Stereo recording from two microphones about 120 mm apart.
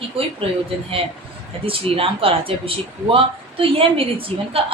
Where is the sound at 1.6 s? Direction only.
50° right (ahead or behind).